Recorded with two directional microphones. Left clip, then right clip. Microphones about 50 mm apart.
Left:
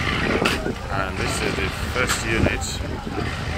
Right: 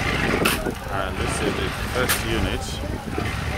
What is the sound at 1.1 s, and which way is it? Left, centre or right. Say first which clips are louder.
Vehicle: left 1 dB; centre.